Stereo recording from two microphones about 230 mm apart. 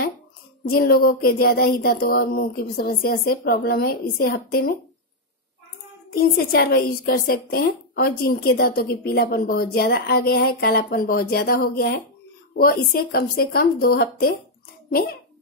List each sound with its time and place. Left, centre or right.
0.7 s a woman's voice: left
6.0 s a woman's voice: left